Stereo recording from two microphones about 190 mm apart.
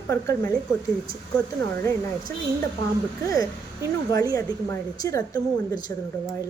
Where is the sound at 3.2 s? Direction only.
20° left (ahead or behind).